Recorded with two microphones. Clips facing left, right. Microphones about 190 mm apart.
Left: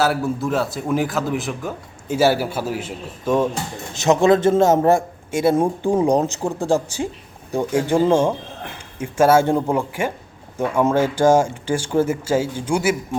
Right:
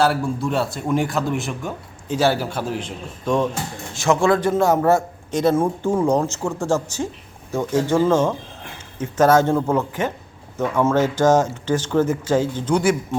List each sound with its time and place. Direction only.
0.0 s a man's voice: 5° left (ahead or behind)
3.9 s speech: 20° left (ahead or behind)